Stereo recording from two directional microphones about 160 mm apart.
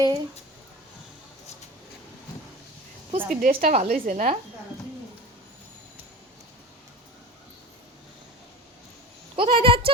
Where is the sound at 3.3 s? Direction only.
55° right (ahead or behind).